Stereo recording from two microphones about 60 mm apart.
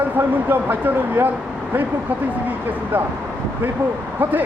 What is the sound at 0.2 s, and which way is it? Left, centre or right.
Speech, right.